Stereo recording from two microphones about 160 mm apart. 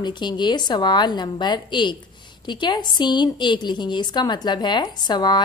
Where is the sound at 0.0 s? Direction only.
30° left (ahead or behind).